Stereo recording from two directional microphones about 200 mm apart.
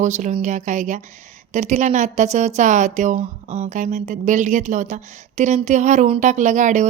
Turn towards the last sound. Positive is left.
turn(degrees=-35)  # may be behind; listen again after turning